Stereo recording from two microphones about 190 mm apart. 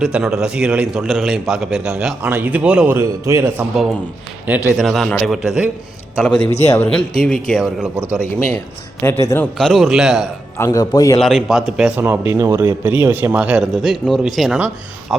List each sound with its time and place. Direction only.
0.0 s a man's voice: 5° right (ahead or behind)
4.8 s a man's voice: centre (ahead or behind)
6.3 s a man's voice: 30° left (ahead or behind)
6.7 s a man's voice: 5° left (ahead or behind)
8.5 s a man's voice: 15° left (ahead or behind)
9.6 s a man's voice: centre (ahead or behind)
10.6 s a man's voice: 20° left (ahead or behind)
11.2 s a man's voice: centre (ahead or behind)